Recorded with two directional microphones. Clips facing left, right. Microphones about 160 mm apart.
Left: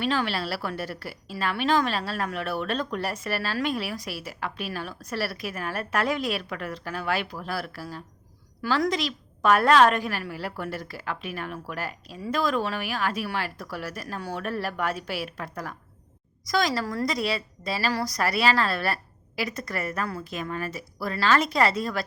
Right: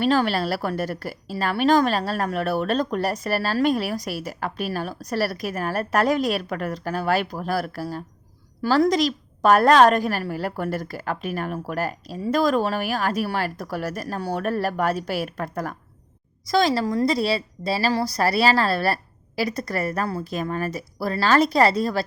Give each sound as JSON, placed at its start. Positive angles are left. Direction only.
{"t": 0.0, "sound": "a woman's voice", "side_deg": -40}
{"t": 16.4, "sound": "a woman's voice", "side_deg": -30}